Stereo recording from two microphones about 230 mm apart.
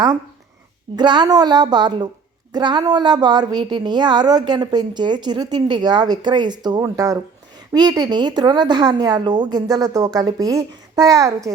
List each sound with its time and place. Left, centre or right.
0.9 s a woman's voice: centre